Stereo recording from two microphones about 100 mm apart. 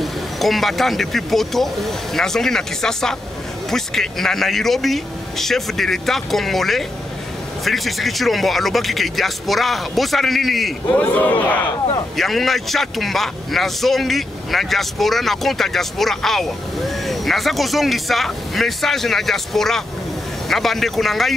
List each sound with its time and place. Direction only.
0.0 s a man's voice: centre (ahead or behind)
10.9 s speech: 15° left (ahead or behind)
12.2 s a man's voice: centre (ahead or behind)